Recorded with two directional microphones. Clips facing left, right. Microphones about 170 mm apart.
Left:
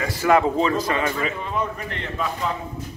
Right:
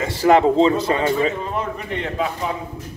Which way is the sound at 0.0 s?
25° right (ahead or behind).